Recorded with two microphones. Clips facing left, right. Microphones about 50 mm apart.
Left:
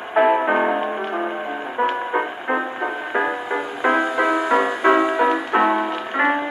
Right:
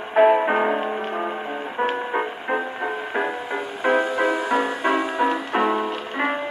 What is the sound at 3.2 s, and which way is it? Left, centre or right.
Music, left.